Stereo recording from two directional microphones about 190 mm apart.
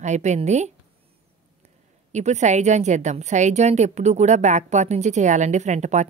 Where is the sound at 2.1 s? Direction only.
35° right (ahead or behind).